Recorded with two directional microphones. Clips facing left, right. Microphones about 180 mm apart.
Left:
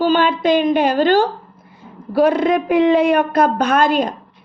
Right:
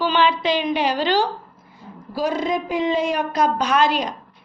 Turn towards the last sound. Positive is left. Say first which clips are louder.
# left 4 dB
turn(degrees=50)  # may be behind; listen again after turning